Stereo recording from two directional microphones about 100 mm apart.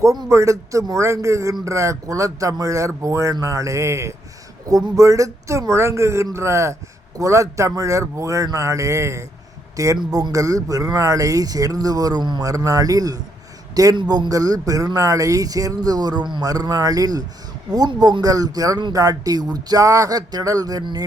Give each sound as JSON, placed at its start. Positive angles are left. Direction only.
{"t": 0.3, "sound": "speech", "side_deg": -30}